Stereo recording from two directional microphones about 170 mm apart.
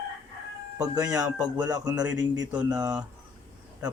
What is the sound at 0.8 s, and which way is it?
Speech, 5° right (ahead or behind).